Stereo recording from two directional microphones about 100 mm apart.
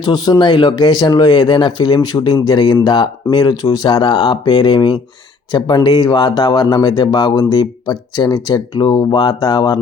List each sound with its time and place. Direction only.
0.0 s speech: 40° left (ahead or behind)